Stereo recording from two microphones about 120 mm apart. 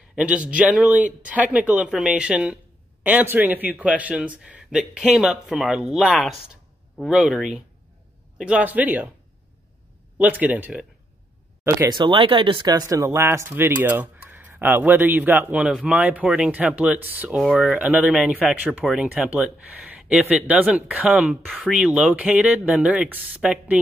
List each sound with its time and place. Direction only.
0.1 s speech: 10° right (ahead or behind)
10.1 s speech: 10° right (ahead or behind)
11.9 s speech: 40° right (ahead or behind); by 18.1 s 15° right (ahead or behind)
18.1 s speech: 5° right (ahead or behind)